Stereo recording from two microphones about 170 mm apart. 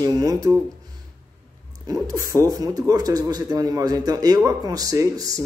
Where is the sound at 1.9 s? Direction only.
20° right (ahead or behind).